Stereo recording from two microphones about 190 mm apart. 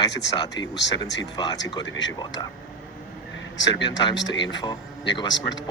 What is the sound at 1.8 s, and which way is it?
Speech, 75° left (ahead or behind).